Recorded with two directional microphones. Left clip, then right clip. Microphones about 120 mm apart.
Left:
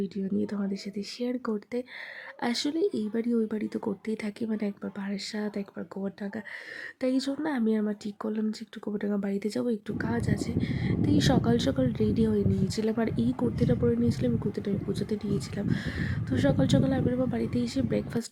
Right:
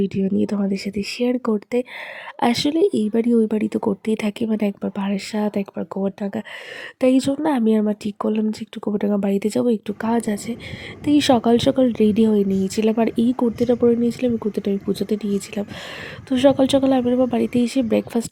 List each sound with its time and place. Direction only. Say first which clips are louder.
0.0 s speech: right 10 dB; 45° right (ahead or behind)